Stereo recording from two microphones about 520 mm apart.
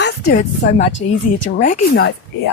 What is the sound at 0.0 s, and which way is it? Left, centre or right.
Speech, centre.